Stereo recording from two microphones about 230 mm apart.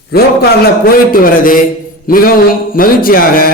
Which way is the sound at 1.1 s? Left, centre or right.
Left.